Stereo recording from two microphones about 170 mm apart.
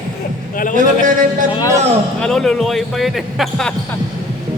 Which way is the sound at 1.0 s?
50° right (ahead or behind).